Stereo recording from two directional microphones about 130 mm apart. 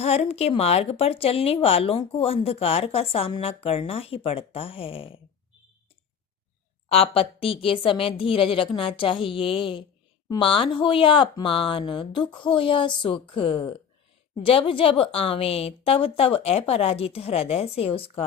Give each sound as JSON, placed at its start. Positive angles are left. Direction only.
{"t": 0.0, "sound": "a woman's voice", "side_deg": 55}
{"t": 6.8, "sound": "a woman's voice", "side_deg": 50}